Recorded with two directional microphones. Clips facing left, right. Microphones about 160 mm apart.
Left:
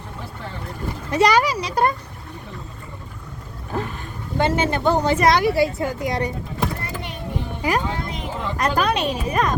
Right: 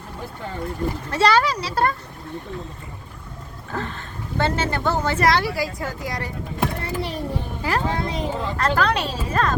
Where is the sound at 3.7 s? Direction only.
20° left (ahead or behind).